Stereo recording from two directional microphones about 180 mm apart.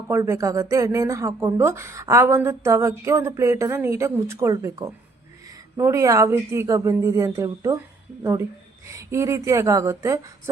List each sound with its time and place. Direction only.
0.1 s speech: 15° right (ahead or behind)